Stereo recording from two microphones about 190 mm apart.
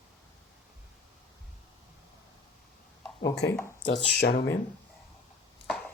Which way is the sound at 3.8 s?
70° left (ahead or behind).